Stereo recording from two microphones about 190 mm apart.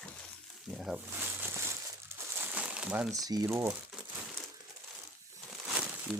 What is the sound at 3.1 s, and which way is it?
Speech, 20° right (ahead or behind).